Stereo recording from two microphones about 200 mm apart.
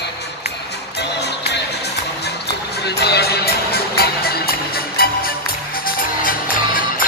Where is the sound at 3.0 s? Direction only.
55° left (ahead or behind).